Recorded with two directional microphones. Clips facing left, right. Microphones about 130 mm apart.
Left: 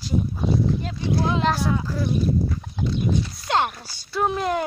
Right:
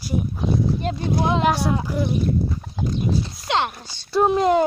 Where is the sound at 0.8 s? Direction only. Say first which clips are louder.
Right 5 dB; 55° right (ahead or behind).